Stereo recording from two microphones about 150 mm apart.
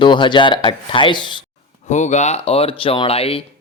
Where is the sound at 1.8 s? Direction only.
50° left (ahead or behind).